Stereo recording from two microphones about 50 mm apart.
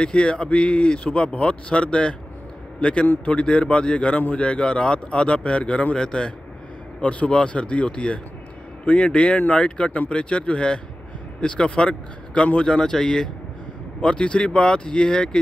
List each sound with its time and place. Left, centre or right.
0.0 s speech: left